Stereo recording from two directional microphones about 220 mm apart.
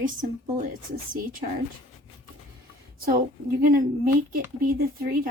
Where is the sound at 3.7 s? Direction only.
40° right (ahead or behind).